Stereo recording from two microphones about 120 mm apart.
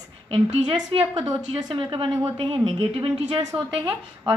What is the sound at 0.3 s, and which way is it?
A woman's voice, 45° right (ahead or behind).